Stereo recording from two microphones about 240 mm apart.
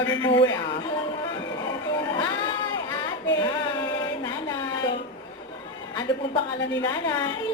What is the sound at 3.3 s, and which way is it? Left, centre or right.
Speech, centre.